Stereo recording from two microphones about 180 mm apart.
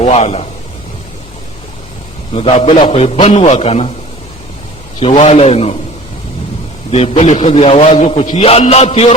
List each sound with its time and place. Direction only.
0.0 s a man's voice: 35° left (ahead or behind)
2.3 s a man's voice: 35° left (ahead or behind)
4.9 s a man's voice: 35° left (ahead or behind)
6.9 s a man's voice: 35° left (ahead or behind)